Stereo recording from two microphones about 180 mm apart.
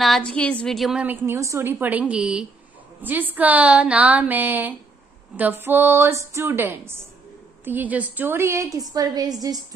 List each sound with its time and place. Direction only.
0.0 s a woman's voice: centre (ahead or behind); by 9.8 s 20° right (ahead or behind)